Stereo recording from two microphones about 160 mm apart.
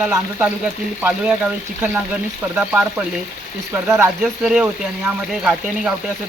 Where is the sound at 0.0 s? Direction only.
10° right (ahead or behind).